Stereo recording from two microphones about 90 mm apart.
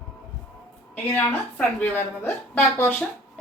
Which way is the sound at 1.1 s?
15° left (ahead or behind).